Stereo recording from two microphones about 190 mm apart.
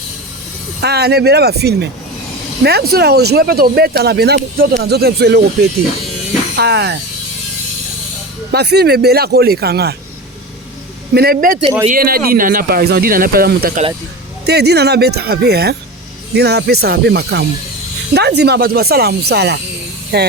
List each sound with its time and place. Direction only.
0.8 s speech: 60° right (ahead or behind)
6.6 s speech: 60° right (ahead or behind)
8.5 s speech: 60° right (ahead or behind)
11.1 s speech: 55° right (ahead or behind)